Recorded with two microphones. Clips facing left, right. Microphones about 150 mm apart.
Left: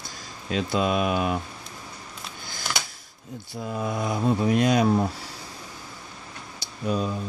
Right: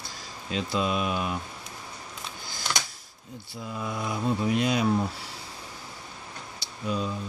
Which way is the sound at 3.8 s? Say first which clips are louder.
Left 4 dB; 45° left (ahead or behind).